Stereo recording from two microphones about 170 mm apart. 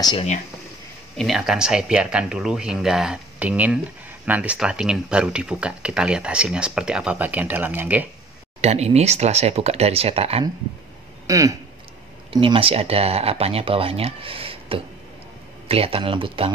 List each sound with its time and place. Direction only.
1.1 s speech: centre (ahead or behind)
8.5 s speech: 40° right (ahead or behind)
11.2 s speech: 20° right (ahead or behind)
12.3 s speech: 30° right (ahead or behind)